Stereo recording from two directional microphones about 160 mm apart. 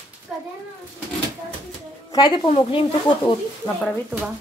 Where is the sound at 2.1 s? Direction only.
25° left (ahead or behind).